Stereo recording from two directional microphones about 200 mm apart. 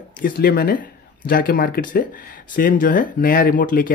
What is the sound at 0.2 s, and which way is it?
Speech, 50° left (ahead or behind).